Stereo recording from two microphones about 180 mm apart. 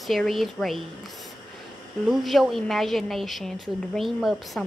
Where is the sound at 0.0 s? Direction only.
Centre (ahead or behind).